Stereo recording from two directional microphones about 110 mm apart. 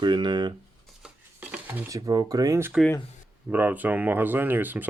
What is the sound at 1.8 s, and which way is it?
Speech, 30° right (ahead or behind).